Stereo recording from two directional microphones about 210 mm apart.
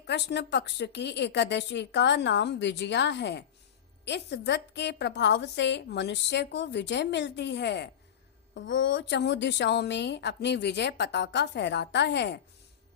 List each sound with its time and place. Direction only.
0.0 s a woman's voice: 50° left (ahead or behind)